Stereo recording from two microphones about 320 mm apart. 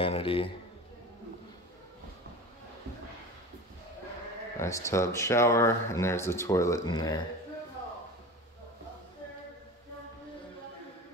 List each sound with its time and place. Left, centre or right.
0.0 s speech: centre
4.6 s speech: centre